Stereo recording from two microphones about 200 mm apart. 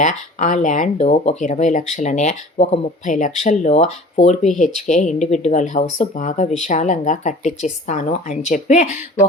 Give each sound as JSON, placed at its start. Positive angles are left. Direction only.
{"t": 0.0, "sound": "speech", "side_deg": 40}